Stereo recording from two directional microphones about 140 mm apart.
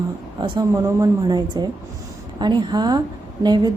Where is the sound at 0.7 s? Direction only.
25° right (ahead or behind).